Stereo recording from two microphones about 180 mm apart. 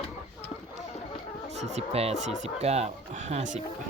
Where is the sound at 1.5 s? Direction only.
40° right (ahead or behind).